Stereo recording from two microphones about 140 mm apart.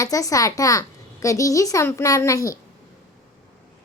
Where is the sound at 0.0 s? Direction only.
25° left (ahead or behind).